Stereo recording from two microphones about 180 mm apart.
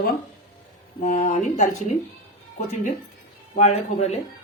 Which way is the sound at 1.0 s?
45° left (ahead or behind).